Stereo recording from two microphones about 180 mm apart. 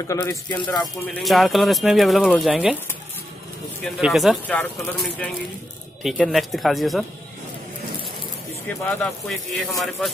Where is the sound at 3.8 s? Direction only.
Centre (ahead or behind).